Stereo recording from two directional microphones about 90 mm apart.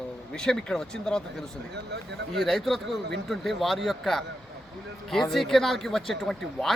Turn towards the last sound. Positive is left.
turn(degrees=5)  # may be behind; listen again after turning